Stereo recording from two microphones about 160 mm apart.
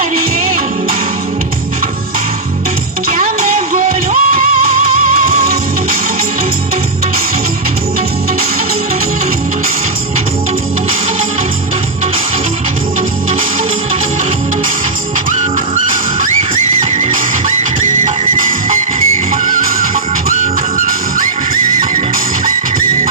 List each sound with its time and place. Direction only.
3.2 s music: 55° right (ahead or behind)
20.4 s music: 55° right (ahead or behind)